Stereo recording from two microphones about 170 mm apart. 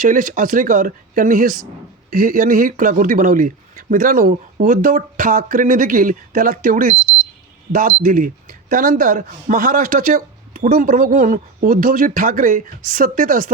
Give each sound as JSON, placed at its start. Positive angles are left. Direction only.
{"t": 0.0, "sound": "speech", "side_deg": -50}